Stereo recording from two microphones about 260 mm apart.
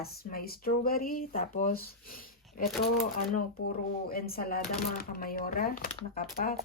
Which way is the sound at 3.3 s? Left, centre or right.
Left.